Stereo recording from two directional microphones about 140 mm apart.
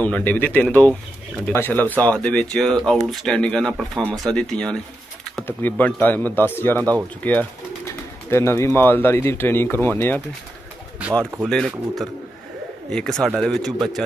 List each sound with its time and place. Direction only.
0.0 s speech: 10° left (ahead or behind)
11.4 s speech: centre (ahead or behind)